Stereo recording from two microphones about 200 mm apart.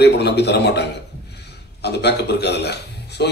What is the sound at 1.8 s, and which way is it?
A man's voice, 55° left (ahead or behind).